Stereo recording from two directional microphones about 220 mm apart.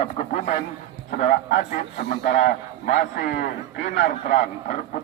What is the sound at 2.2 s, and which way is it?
A man's voice, 35° left (ahead or behind).